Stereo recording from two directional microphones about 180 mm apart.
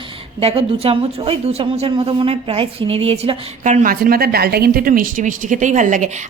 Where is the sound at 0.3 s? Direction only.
30° right (ahead or behind).